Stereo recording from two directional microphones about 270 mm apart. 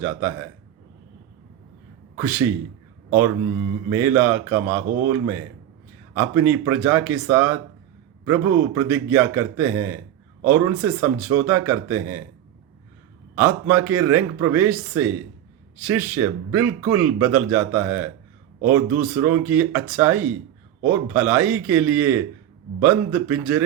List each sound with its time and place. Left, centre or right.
0.0 s speech: centre
2.1 s speech: centre
3.8 s speech: centre
13.3 s speech: centre